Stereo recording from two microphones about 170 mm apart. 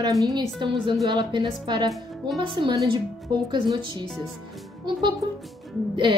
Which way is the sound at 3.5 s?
25° right (ahead or behind).